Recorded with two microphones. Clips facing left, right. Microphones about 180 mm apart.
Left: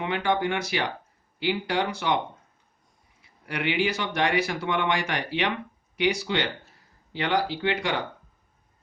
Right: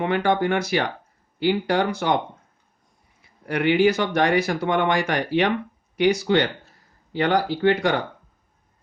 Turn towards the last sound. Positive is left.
turn(degrees=-45)  # may be behind; listen again after turning